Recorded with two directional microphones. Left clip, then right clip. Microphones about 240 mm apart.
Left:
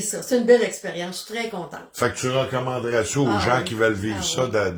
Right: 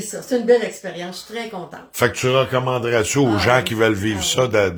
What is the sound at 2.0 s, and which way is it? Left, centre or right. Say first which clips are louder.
A man's voice: right 5 dB; right.